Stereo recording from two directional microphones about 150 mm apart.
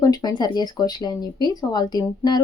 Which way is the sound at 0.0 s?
25° left (ahead or behind).